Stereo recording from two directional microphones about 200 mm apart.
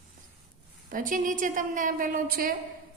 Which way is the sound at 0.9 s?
40° right (ahead or behind).